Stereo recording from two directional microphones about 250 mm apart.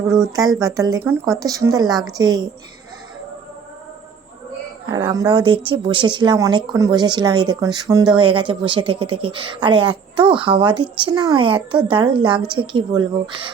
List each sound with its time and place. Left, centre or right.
0.3 s speech: centre
4.9 s speech: centre